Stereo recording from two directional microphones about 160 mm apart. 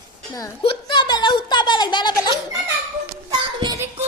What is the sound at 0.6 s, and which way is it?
A woman's voice, 30° left (ahead or behind).